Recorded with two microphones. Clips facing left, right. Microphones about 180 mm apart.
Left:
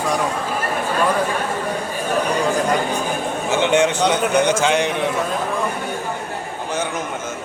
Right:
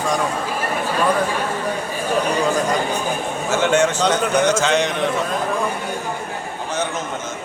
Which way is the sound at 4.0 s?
15° left (ahead or behind).